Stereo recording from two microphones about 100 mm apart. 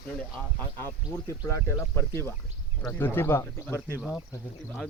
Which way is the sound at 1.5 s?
25° left (ahead or behind).